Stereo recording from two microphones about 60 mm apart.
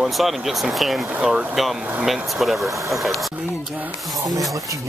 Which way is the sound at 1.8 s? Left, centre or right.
Centre.